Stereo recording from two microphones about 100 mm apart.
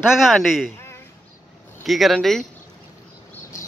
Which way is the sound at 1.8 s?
Centre (ahead or behind).